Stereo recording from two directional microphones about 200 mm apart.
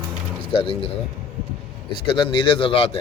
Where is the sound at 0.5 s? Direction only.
30° left (ahead or behind).